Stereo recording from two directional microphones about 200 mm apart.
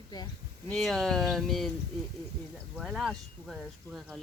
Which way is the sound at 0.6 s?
Centre (ahead or behind).